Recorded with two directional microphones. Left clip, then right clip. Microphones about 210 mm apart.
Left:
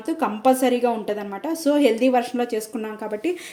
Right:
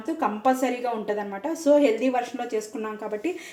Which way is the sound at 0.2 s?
55° left (ahead or behind).